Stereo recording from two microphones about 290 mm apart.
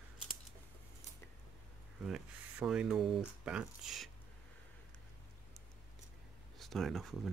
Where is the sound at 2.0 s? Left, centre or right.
Centre.